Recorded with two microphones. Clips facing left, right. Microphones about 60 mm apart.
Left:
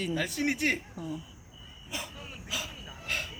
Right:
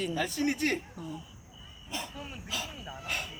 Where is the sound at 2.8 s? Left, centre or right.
Centre.